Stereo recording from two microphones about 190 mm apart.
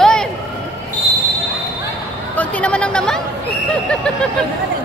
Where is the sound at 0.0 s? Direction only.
5° left (ahead or behind).